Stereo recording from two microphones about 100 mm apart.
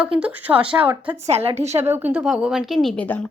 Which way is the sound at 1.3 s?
90° right.